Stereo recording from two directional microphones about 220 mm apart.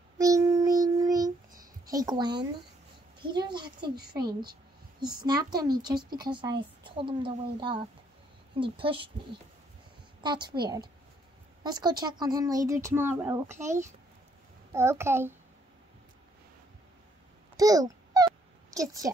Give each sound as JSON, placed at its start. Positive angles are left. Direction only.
{"t": 0.2, "sound": "child singing", "side_deg": -15}
{"t": 1.9, "sound": "a woman's voice", "side_deg": -15}
{"t": 5.2, "sound": "a woman's voice", "side_deg": -20}
{"t": 10.2, "sound": "a woman's voice", "side_deg": -20}
{"t": 17.6, "sound": "babbling", "side_deg": -15}